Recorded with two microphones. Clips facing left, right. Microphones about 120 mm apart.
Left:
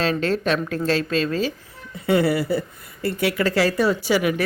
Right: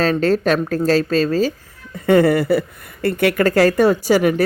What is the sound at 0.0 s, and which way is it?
A woman's voice, 40° right (ahead or behind).